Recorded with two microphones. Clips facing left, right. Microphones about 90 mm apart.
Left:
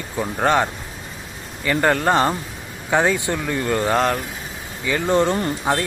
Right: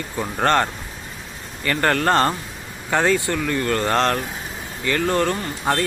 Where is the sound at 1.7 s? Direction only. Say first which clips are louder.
Left 1 dB; 10° left (ahead or behind).